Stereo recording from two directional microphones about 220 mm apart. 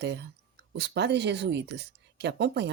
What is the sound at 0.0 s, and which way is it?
Speech, 50° right (ahead or behind).